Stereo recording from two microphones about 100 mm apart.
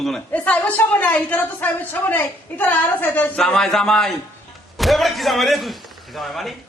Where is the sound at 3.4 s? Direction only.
5° left (ahead or behind).